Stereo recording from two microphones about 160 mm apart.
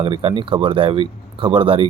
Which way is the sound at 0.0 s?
35° right (ahead or behind).